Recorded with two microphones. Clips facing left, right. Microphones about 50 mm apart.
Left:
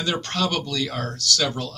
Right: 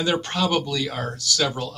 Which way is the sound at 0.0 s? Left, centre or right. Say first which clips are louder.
Right 2 dB; centre.